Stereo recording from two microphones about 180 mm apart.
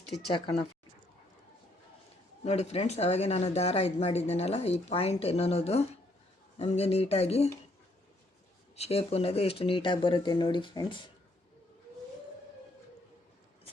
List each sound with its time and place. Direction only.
2.4 s speech: 35° left (ahead or behind)
8.7 s speech: 35° left (ahead or behind)